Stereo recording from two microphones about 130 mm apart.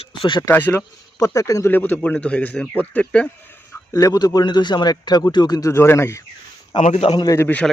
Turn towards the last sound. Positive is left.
turn(degrees=10)  # may be behind; listen again after turning